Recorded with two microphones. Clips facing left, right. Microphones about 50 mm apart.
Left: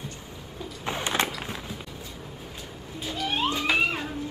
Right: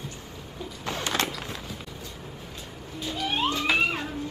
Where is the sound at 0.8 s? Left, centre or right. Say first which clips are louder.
Left 1 dB; centre.